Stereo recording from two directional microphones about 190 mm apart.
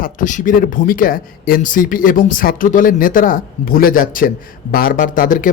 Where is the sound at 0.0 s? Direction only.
45° left (ahead or behind).